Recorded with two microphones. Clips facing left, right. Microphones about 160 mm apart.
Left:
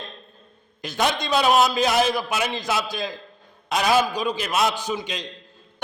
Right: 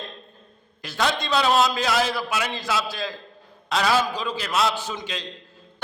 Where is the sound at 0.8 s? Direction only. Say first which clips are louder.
Left 1 dB; 20° left (ahead or behind).